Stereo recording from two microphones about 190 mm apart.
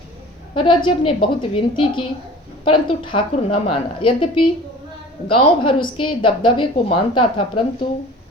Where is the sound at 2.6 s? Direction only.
25° left (ahead or behind).